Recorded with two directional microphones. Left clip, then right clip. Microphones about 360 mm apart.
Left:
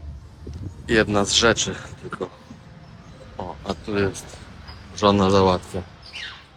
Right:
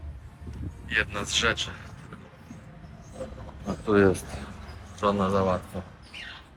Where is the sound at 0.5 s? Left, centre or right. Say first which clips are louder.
Left 7 dB; centre.